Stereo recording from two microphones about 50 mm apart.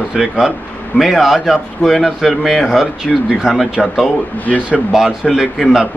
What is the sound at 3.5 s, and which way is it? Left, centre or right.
Speech, centre.